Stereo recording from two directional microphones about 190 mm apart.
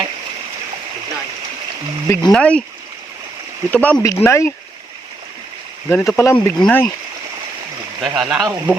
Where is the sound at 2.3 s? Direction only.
5° left (ahead or behind).